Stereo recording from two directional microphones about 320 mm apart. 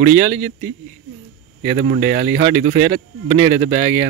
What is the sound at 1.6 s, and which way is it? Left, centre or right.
Speech, right.